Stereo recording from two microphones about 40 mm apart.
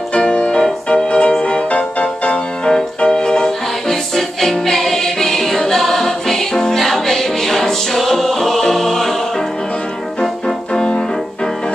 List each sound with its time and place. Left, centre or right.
0.1 s music: left
3.9 s music: centre
10.7 s music: left